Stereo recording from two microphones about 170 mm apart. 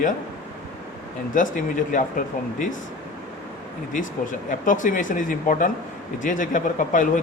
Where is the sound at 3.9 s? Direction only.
50° left (ahead or behind).